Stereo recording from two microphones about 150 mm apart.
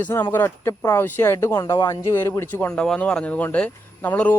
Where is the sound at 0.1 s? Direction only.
15° left (ahead or behind).